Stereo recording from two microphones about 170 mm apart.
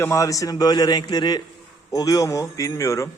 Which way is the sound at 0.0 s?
20° left (ahead or behind).